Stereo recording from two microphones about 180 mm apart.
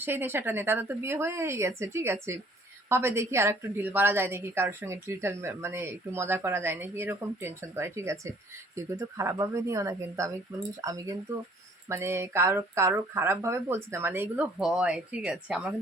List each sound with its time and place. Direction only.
0.0 s a woman's voice: 10° right (ahead or behind)